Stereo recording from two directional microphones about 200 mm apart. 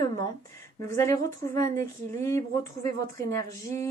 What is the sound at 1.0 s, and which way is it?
Speech, 15° left (ahead or behind).